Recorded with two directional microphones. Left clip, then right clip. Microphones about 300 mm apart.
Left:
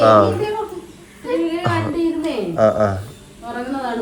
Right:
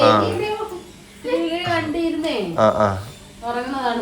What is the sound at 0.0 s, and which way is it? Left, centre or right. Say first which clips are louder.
Speech: left 3 dB; centre.